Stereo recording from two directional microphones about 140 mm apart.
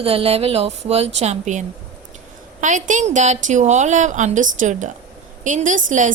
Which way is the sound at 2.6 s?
60° right (ahead or behind).